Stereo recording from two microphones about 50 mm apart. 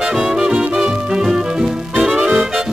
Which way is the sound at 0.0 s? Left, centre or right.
Centre.